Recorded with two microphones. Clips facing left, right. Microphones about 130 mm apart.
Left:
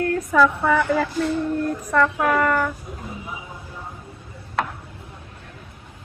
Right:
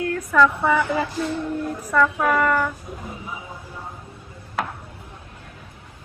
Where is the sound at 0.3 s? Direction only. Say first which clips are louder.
Even; 10° left (ahead or behind).